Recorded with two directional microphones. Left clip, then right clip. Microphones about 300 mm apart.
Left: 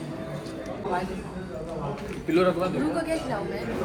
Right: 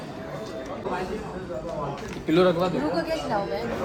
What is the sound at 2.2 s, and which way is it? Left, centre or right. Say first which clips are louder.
Speech: right 2 dB; right.